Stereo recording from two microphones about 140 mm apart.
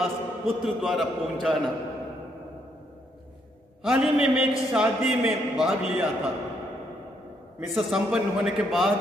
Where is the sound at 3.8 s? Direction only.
5° right (ahead or behind).